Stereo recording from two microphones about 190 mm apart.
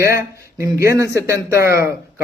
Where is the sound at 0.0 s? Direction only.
15° right (ahead or behind).